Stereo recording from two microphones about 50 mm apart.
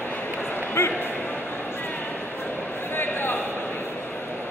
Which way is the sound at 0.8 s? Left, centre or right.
Left.